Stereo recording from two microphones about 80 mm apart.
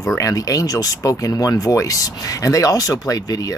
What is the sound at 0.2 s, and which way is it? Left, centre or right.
Speech, left.